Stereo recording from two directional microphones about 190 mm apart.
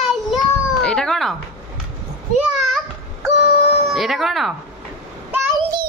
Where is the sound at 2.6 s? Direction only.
Centre (ahead or behind).